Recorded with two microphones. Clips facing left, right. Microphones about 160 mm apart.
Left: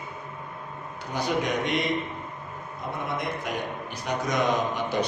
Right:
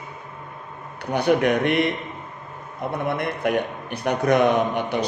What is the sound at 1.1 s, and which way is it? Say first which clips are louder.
Speech: right 8 dB; 60° right (ahead or behind).